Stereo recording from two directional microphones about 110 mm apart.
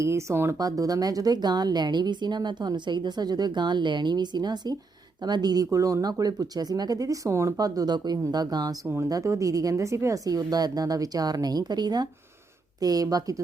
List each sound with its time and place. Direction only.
0.0 s speech: 25° right (ahead or behind)